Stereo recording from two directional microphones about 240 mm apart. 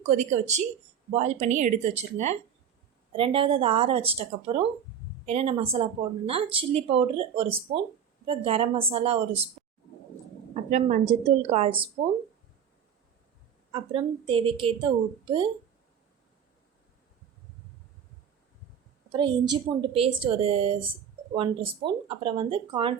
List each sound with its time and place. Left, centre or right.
0.1 s speech: right
10.5 s speech: right
13.7 s speech: right
19.1 s speech: centre